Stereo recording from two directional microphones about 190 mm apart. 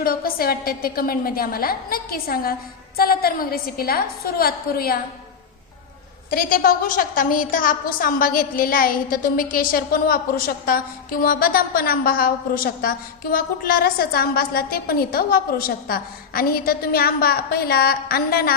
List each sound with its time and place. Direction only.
0.0 s a woman's voice: 50° left (ahead or behind)
6.3 s a woman's voice: 50° left (ahead or behind)